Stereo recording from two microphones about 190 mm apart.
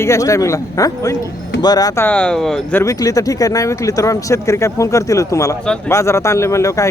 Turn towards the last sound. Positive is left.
turn(degrees=15)  # may be behind; listen again after turning